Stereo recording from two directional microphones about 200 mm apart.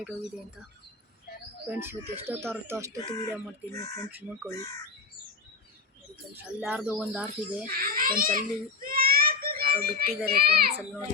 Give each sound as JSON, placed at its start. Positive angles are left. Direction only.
{"t": 1.7, "sound": "speech", "side_deg": -10}
{"t": 6.3, "sound": "speech", "side_deg": -5}
{"t": 7.6, "sound": "a child's voice", "side_deg": -45}